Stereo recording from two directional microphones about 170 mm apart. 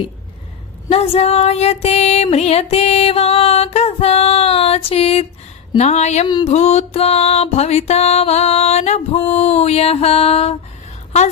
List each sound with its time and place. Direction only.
0.9 s female singing: 35° left (ahead or behind)